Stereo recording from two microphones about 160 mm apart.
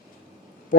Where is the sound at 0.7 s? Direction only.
60° left (ahead or behind).